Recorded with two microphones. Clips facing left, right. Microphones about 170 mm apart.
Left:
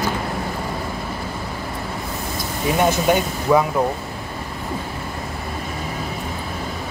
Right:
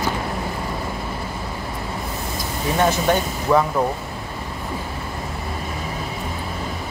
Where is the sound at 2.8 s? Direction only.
15° left (ahead or behind).